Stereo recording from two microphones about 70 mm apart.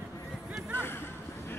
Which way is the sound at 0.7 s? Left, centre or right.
Left.